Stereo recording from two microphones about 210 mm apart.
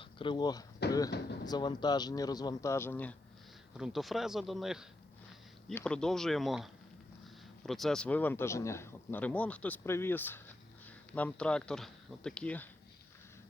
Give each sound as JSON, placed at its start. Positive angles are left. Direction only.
{"t": 0.0, "sound": "speech", "side_deg": 25}
{"t": 0.8, "sound": "beatboxing", "side_deg": 50}
{"t": 1.5, "sound": "a man's voice", "side_deg": 20}